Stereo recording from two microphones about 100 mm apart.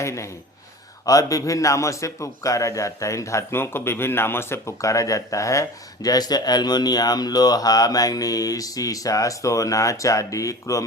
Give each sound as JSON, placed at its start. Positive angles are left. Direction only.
{"t": 0.0, "sound": "a man's voice", "side_deg": 30}